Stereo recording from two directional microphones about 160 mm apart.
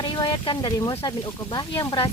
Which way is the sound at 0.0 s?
25° left (ahead or behind).